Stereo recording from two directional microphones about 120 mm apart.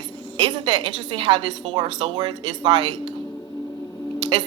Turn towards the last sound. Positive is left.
turn(degrees=-40)  # may be behind; listen again after turning